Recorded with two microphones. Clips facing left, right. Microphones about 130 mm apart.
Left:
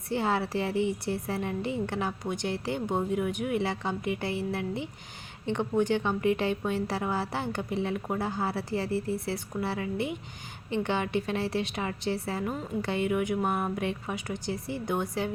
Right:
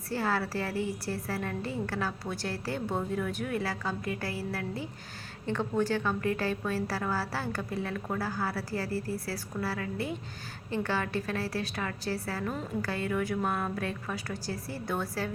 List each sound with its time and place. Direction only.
0.1 s a woman's voice: 20° left (ahead or behind)